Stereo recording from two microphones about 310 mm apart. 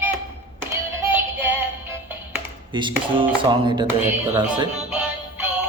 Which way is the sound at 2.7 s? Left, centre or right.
Centre.